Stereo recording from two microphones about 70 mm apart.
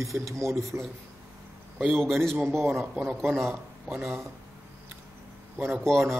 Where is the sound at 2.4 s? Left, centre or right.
Right.